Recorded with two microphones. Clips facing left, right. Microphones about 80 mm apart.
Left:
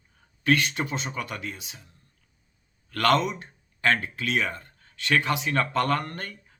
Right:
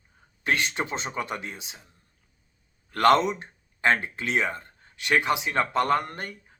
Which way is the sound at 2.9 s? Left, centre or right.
Right.